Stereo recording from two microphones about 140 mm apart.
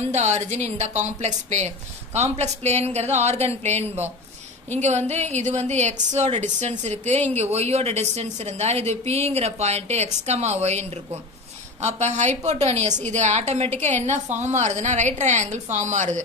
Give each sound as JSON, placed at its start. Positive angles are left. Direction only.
{"t": 0.1, "sound": "a woman's voice", "side_deg": -55}